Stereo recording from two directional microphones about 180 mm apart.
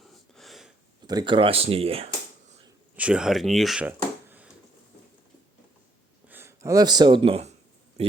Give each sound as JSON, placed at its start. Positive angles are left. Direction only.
{"t": 0.0, "sound": "a sound", "side_deg": 0}
{"t": 1.0, "sound": "speech", "side_deg": -25}
{"t": 2.9, "sound": "speech", "side_deg": -5}
{"t": 6.2, "sound": "speech", "side_deg": -10}